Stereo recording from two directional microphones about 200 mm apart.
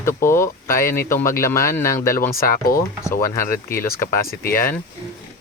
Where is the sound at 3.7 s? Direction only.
45° left (ahead or behind).